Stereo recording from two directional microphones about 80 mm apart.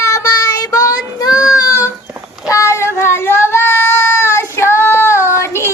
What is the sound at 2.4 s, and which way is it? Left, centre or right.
Speech, left.